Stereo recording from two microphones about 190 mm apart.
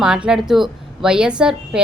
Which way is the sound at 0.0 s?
5° right (ahead or behind).